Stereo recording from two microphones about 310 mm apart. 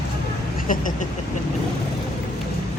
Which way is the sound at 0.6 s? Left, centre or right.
Left.